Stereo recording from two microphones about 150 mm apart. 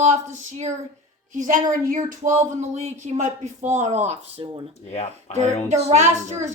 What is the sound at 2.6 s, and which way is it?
Speech, 50° right (ahead or behind).